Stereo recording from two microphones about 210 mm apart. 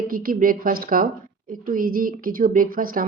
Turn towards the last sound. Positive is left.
turn(degrees=-40)  # may be behind; listen again after turning